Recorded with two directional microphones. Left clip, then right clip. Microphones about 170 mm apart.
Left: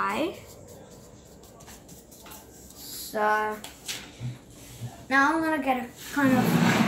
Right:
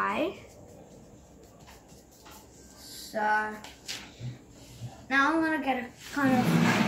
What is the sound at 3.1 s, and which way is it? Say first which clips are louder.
Speech: left 3 dB; 5° right (ahead or behind).